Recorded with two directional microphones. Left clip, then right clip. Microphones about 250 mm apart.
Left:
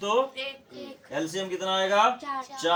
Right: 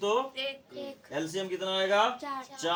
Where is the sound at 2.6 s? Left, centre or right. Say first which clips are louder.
Left 6 dB; centre.